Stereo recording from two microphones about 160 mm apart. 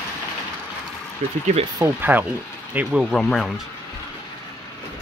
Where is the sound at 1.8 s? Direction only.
10° right (ahead or behind).